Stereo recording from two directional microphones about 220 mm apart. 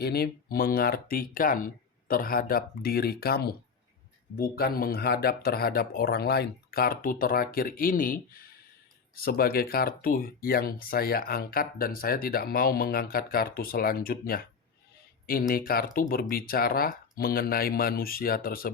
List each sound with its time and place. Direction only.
0.0 s speech: 45° left (ahead or behind)